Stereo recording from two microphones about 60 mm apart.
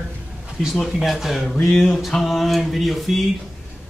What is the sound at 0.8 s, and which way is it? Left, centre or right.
Speech, centre.